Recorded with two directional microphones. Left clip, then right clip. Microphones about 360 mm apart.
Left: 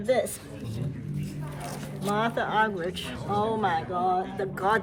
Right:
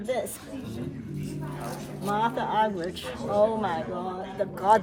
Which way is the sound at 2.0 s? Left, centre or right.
Centre.